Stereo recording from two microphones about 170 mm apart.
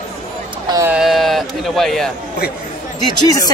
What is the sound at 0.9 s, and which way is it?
Speech, centre (ahead or behind).